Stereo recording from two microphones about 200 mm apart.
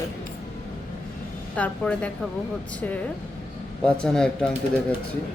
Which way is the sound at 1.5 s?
5° left (ahead or behind).